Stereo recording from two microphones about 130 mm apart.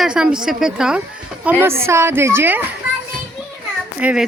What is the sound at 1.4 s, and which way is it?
A woman's voice, 15° right (ahead or behind).